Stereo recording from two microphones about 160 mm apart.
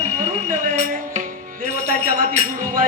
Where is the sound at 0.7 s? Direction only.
45° right (ahead or behind).